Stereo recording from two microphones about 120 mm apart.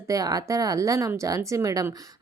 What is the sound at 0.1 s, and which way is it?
Speech, 30° right (ahead or behind).